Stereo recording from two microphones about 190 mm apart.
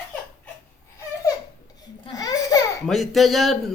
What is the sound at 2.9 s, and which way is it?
Speech, centre (ahead or behind).